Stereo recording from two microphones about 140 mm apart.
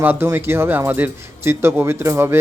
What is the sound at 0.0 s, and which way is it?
Speech, 15° right (ahead or behind).